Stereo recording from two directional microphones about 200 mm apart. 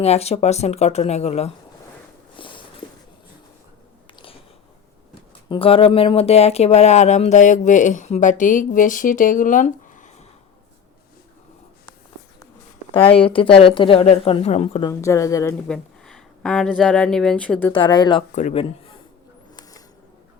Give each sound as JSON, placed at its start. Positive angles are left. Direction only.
{"t": 0.0, "sound": "speech", "side_deg": 30}
{"t": 2.3, "sound": "a sound", "side_deg": 25}
{"t": 5.5, "sound": "speech", "side_deg": 25}
{"t": 13.2, "sound": "speech", "side_deg": 25}
{"t": 14.8, "sound": "speech", "side_deg": 15}
{"t": 15.6, "sound": "speech", "side_deg": 5}
{"t": 17.7, "sound": "speech", "side_deg": 25}
{"t": 18.3, "sound": "speech", "side_deg": 30}